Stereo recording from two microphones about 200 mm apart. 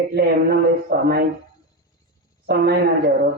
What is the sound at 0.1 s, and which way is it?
Speech, 50° right (ahead or behind).